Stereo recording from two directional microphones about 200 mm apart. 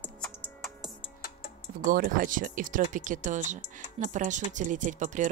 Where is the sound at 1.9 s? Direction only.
45° right (ahead or behind).